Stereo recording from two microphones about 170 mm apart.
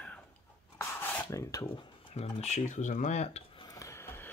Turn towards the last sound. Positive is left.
turn(degrees=15)  # may be behind; listen again after turning